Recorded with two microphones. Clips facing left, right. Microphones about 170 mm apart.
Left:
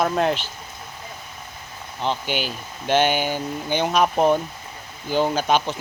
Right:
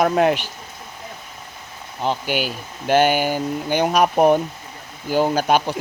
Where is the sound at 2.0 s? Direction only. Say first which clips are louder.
Right 3 dB; 10° right (ahead or behind).